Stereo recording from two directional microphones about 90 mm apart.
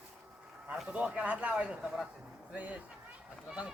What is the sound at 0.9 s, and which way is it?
Speech, 15° right (ahead or behind).